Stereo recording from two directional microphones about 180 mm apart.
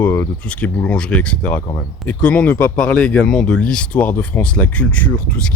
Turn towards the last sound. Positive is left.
turn(degrees=5)  # may be behind; listen again after turning